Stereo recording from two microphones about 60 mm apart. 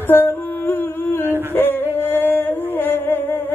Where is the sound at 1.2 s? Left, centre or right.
Right.